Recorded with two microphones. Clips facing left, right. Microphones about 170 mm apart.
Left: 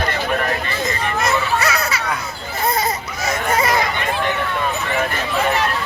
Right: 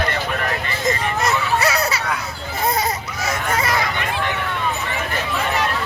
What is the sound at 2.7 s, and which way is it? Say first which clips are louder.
Baby cry: left 1 dB; 10° right (ahead or behind).